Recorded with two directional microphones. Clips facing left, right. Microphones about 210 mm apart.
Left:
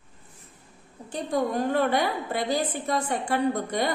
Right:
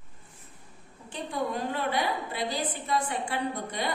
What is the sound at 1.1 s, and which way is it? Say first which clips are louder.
A woman's voice: left 5 dB; 45° left (ahead or behind).